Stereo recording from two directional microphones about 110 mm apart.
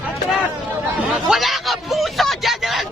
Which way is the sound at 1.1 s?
Centre (ahead or behind).